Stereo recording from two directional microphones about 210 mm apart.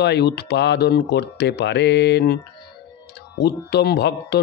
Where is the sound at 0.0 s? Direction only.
50° left (ahead or behind).